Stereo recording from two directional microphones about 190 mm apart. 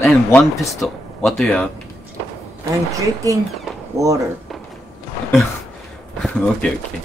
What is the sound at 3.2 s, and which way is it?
Speech, 20° right (ahead or behind).